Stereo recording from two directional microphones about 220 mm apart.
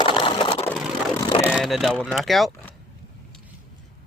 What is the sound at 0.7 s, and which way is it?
Vehicle, 5° right (ahead or behind).